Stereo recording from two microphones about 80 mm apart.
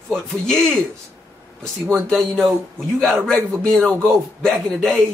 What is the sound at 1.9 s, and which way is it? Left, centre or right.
A man's voice, centre.